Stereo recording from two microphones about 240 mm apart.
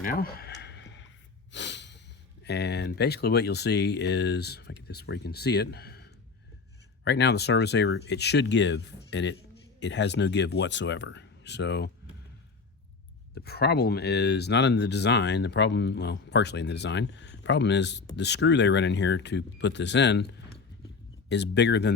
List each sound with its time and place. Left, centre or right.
0.0 s a sound: left
1.5 s breathing: left
2.4 s speech: left
13.3 s speech: left